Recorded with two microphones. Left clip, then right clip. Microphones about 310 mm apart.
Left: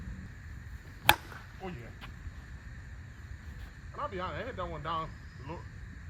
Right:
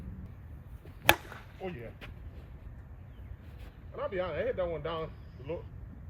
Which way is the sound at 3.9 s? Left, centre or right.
Centre.